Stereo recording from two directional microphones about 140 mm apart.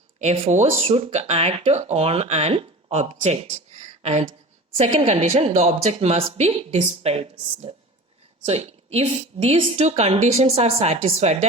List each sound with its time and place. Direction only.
0.2 s speech: 55° right (ahead or behind)